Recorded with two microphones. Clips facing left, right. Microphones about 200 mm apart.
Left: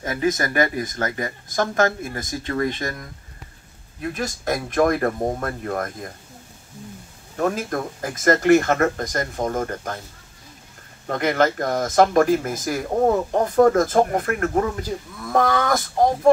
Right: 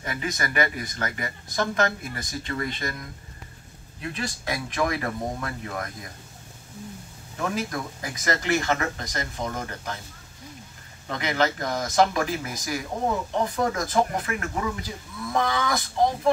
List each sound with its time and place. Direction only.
0.0 s speech: 45° left (ahead or behind)
7.3 s speech: 50° left (ahead or behind)
11.1 s speech: 50° left (ahead or behind)